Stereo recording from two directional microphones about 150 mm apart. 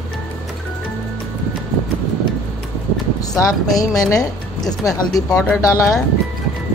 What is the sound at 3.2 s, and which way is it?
Speech, 25° left (ahead or behind).